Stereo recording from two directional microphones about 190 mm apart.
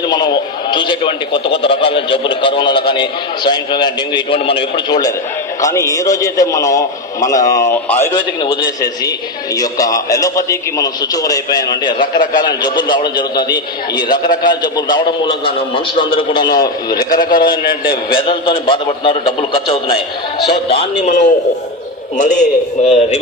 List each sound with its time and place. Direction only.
0.1 s a man's voice: 20° left (ahead or behind)